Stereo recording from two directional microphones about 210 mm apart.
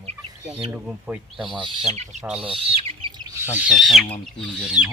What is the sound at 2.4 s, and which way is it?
Speech, 25° right (ahead or behind).